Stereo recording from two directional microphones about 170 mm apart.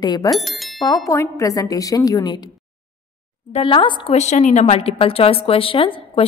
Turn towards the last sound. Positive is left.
turn(degrees=30)  # may be behind; listen again after turning